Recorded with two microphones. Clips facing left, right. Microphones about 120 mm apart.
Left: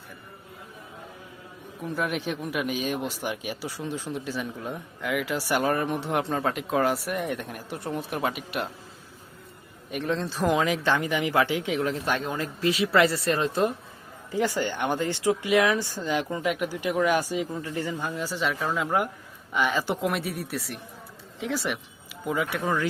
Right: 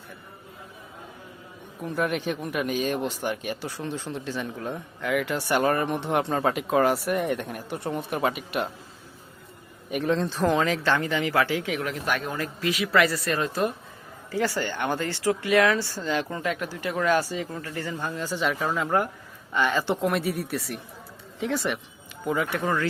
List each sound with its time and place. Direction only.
1.8 s speech: centre (ahead or behind)
9.9 s speech: centre (ahead or behind)
10.4 s speech: 10° left (ahead or behind)